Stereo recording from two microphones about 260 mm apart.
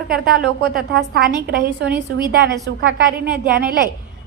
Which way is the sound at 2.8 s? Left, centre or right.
Right.